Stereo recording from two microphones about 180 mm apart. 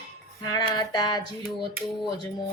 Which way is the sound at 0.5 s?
20° left (ahead or behind).